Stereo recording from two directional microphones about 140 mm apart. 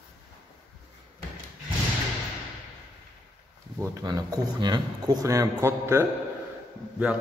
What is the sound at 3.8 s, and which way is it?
Speech, 25° right (ahead or behind).